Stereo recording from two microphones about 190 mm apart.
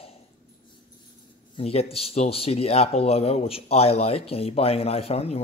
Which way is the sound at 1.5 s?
30° left (ahead or behind).